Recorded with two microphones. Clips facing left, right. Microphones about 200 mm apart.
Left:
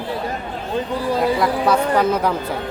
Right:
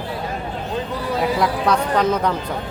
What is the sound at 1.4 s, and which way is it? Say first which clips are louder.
Speech: left 2 dB; 5° left (ahead or behind).